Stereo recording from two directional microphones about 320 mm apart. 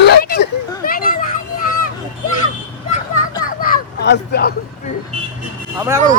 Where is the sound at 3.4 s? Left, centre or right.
Left.